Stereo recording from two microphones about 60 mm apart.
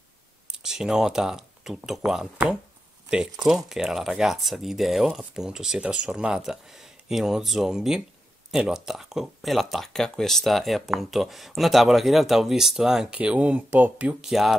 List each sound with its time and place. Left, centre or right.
0.5 s speech: centre
3.3 s speech: centre
13.1 s speech: right
14.2 s speech: centre